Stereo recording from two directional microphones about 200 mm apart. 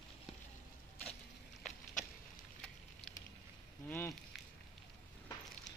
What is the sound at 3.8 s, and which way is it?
Speech, 10° left (ahead or behind).